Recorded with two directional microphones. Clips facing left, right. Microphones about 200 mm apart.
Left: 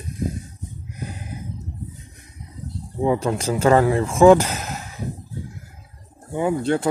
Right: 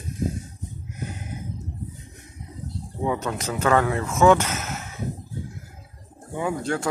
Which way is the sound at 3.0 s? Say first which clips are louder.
Left 6 dB; 30° left (ahead or behind).